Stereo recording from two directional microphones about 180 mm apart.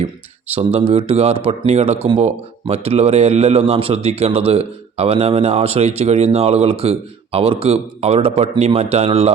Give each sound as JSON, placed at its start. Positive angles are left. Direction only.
{"t": 0.5, "sound": "speech", "side_deg": -30}